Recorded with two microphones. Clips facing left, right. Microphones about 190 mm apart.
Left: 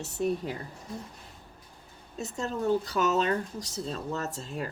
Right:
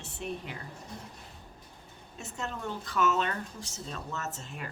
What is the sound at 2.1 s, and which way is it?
Speech, 40° left (ahead or behind).